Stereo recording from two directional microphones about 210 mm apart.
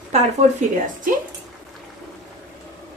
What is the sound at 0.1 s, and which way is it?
Speech, 30° right (ahead or behind).